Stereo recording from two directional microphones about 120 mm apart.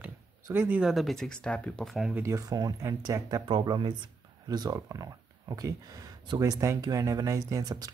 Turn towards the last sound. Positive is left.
turn(degrees=-30)  # may be behind; listen again after turning